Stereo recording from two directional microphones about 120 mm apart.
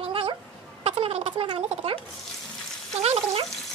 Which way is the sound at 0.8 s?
60° right (ahead or behind).